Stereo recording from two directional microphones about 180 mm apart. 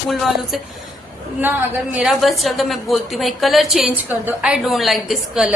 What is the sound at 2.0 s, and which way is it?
A woman's voice, centre (ahead or behind).